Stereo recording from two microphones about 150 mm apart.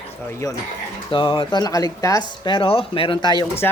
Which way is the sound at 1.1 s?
35° left (ahead or behind).